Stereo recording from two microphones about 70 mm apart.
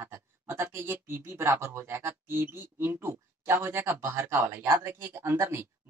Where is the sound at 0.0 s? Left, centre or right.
Right.